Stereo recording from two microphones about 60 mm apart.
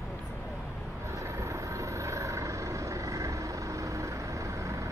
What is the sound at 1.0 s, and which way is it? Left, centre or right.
Vehicle, right.